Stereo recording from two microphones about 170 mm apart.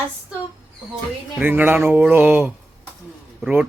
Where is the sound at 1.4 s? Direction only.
10° right (ahead or behind).